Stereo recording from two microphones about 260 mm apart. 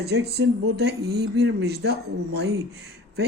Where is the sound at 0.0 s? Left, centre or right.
Right.